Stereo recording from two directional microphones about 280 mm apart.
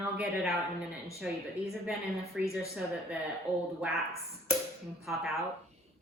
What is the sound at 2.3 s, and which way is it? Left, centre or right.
Speech, centre.